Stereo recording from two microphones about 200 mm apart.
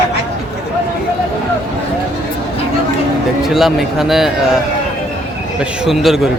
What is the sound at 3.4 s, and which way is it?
Speech, centre (ahead or behind).